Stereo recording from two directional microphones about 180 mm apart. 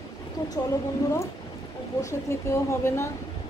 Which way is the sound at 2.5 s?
15° left (ahead or behind).